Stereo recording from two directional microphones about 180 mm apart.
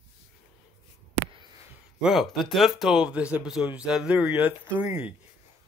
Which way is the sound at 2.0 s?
Centre (ahead or behind).